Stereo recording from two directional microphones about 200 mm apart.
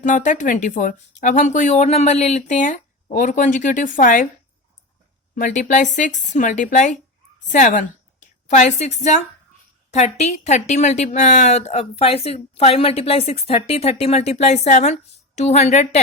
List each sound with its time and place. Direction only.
0.0 s a woman's voice: 40° left (ahead or behind)
5.3 s a woman's voice: 40° left (ahead or behind)